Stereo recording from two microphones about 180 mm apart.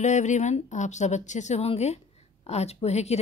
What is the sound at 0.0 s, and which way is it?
Speech, 40° left (ahead or behind).